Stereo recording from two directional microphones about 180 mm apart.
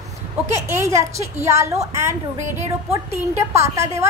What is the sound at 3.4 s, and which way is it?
Speech, 15° right (ahead or behind).